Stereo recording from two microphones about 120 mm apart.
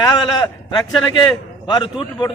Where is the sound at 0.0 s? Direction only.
35° left (ahead or behind).